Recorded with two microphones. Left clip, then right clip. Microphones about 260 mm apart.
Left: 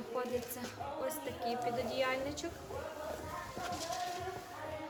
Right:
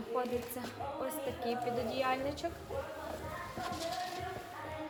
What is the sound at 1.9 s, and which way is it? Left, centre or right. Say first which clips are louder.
Speech: right 1 dB; centre.